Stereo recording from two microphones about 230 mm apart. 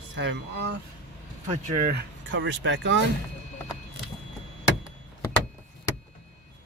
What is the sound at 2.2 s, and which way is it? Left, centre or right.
Speech, right.